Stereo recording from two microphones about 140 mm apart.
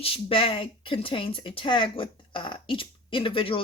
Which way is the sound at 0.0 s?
40° left (ahead or behind).